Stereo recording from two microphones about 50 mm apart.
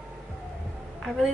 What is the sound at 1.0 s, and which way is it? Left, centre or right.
Speech, centre.